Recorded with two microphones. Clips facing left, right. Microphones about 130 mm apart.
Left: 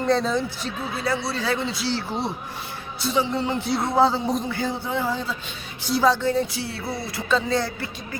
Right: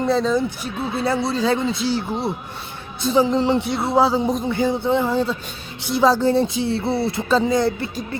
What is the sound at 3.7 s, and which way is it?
Speech, 5° right (ahead or behind).